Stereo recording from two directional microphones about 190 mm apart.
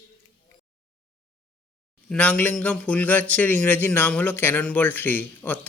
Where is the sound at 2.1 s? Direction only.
5° left (ahead or behind).